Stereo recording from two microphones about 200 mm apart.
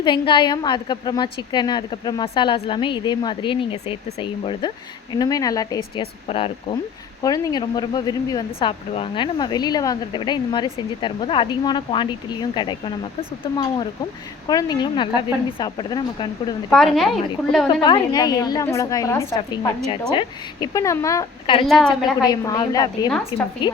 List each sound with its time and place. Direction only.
0.0 s speech: 25° left (ahead or behind)
16.6 s a woman's voice: centre (ahead or behind)
17.7 s a woman's voice: 20° left (ahead or behind)
21.7 s a woman's voice: centre (ahead or behind)
22.2 s speech: 20° left (ahead or behind)